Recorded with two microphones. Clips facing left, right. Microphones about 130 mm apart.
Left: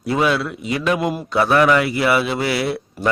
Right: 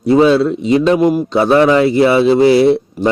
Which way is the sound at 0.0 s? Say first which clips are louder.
Right 9 dB; 25° right (ahead or behind).